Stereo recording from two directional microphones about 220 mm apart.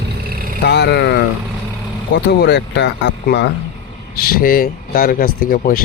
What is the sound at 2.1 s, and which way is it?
Speech, 50° left (ahead or behind).